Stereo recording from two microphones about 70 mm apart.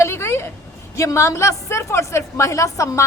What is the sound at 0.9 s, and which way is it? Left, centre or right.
A woman's voice, left.